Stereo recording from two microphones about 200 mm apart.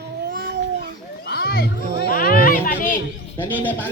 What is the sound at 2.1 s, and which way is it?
Speech, 45° left (ahead or behind).